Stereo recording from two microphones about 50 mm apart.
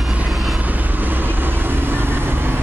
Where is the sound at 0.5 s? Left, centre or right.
Right.